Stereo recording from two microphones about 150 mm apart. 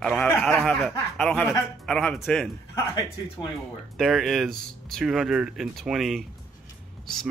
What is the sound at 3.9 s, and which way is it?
Speech, centre (ahead or behind).